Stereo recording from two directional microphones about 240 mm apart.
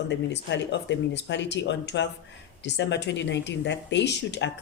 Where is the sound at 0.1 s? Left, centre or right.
Left.